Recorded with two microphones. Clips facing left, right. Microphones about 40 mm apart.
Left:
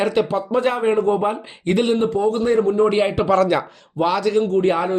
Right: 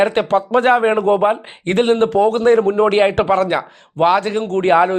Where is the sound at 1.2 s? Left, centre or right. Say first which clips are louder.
Right 6 dB; right.